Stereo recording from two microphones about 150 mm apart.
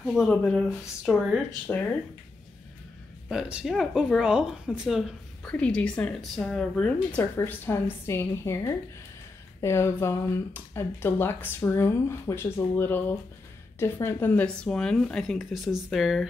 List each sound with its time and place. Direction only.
0.0 s speech: centre (ahead or behind)
3.3 s speech: 5° right (ahead or behind)